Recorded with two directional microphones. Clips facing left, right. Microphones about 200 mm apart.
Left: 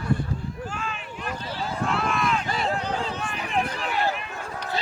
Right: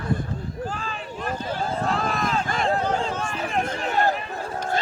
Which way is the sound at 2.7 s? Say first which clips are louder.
Right 4 dB; 45° right (ahead or behind).